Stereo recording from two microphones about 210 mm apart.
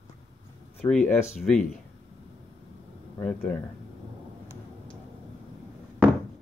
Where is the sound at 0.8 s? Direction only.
5° left (ahead or behind).